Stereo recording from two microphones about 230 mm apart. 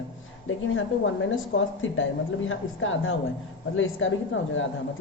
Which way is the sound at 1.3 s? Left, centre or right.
Left.